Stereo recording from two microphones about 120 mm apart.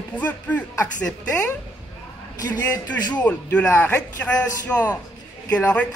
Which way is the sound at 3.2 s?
10° left (ahead or behind).